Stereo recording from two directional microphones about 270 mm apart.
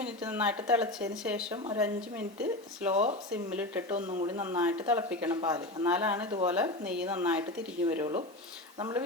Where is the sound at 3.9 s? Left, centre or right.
Right.